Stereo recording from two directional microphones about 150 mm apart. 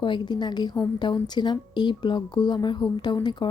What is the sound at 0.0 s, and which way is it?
Speech, 30° left (ahead or behind).